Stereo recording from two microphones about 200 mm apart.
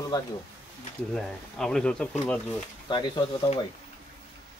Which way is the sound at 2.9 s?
20° left (ahead or behind).